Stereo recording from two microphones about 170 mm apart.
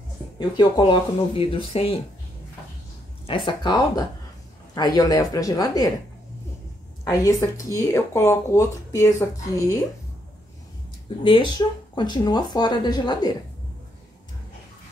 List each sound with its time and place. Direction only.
0.4 s speech: 25° left (ahead or behind)
3.3 s speech: 30° left (ahead or behind)
7.1 s speech: 20° left (ahead or behind)
11.2 s speech: 30° left (ahead or behind)